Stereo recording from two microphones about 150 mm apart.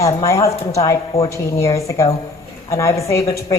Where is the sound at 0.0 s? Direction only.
20° left (ahead or behind).